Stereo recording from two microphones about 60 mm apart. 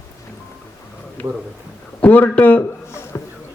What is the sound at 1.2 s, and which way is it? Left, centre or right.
Speech, left.